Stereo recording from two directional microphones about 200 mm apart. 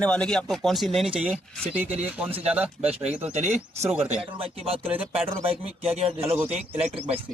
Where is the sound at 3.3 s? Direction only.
35° right (ahead or behind).